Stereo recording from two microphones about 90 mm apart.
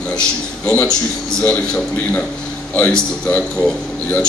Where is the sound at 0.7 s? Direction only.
10° left (ahead or behind).